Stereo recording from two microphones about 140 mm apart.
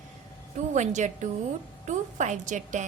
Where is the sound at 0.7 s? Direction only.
60° right (ahead or behind).